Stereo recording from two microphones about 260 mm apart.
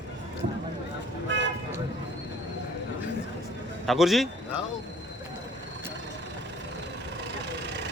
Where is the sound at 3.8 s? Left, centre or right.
Centre.